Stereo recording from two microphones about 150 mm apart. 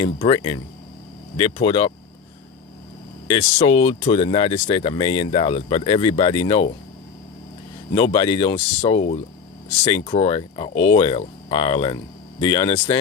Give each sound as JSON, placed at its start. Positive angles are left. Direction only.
{"t": 0.0, "sound": "speech", "side_deg": 35}
{"t": 3.2, "sound": "speech", "side_deg": 40}
{"t": 7.9, "sound": "speech", "side_deg": 35}